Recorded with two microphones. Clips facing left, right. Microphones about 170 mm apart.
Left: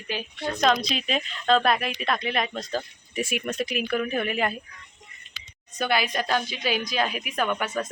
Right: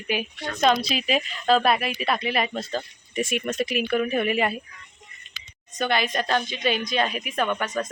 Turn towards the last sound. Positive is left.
turn(degrees=5)  # may be behind; listen again after turning